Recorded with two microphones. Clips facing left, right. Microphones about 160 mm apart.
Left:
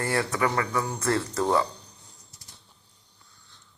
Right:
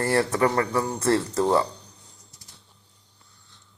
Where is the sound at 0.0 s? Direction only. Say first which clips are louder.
Right 4 dB; 35° right (ahead or behind).